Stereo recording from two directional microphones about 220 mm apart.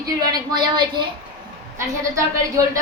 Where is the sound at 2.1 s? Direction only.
15° right (ahead or behind).